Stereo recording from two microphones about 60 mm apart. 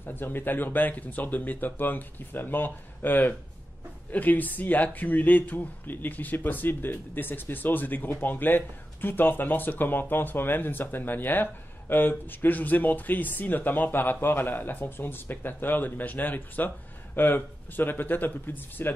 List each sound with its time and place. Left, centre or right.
0.0 s speech: left